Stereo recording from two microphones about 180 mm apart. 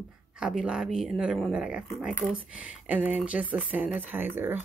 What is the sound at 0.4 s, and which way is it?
Speech, 5° right (ahead or behind).